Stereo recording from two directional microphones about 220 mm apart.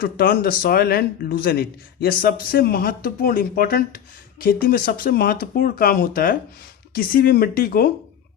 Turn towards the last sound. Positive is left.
turn(degrees=45)  # may be behind; listen again after turning